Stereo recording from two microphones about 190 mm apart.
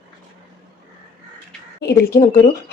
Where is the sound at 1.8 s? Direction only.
60° left (ahead or behind).